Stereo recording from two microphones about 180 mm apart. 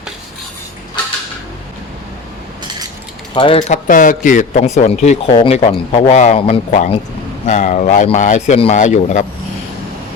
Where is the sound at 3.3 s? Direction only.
30° left (ahead or behind).